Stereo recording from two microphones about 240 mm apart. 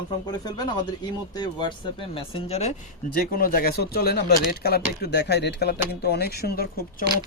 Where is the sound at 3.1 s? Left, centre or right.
Left.